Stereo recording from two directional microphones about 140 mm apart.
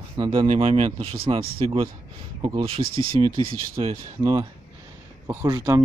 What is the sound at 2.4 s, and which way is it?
Speech, 25° right (ahead or behind).